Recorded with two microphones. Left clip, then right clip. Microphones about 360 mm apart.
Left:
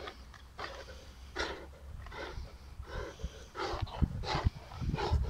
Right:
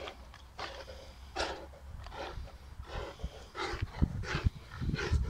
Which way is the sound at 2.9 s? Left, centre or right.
Centre.